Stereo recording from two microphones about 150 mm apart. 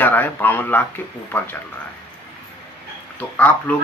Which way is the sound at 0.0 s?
10° left (ahead or behind).